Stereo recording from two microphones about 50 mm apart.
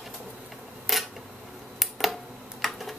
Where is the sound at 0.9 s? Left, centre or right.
Centre.